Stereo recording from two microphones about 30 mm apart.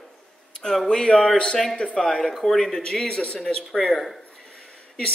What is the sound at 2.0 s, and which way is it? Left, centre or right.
A man's voice, centre.